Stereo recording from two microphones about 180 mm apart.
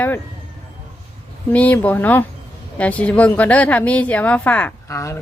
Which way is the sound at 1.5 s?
10° left (ahead or behind).